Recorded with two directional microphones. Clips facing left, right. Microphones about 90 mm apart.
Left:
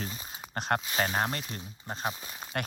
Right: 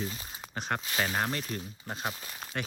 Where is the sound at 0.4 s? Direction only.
10° left (ahead or behind).